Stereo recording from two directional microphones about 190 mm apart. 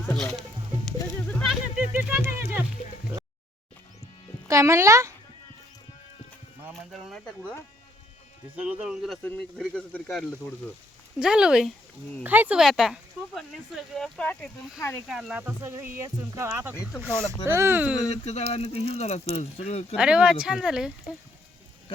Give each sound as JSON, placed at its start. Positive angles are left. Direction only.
{"t": 0.2, "sound": "speech", "side_deg": 0}
{"t": 1.3, "sound": "music", "side_deg": 0}
{"t": 4.4, "sound": "speech", "side_deg": -15}
{"t": 6.7, "sound": "speech", "side_deg": 0}
{"t": 8.6, "sound": "speech", "side_deg": -5}
{"t": 18.1, "sound": "speech", "side_deg": 35}
{"t": 20.0, "sound": "speech", "side_deg": -5}